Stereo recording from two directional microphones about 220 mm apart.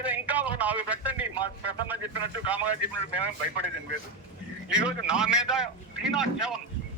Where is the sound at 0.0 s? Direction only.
5° right (ahead or behind).